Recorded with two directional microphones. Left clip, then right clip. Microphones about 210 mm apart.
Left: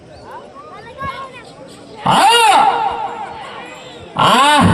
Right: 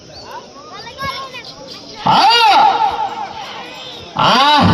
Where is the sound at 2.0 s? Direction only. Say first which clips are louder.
Even; 55° left (ahead or behind).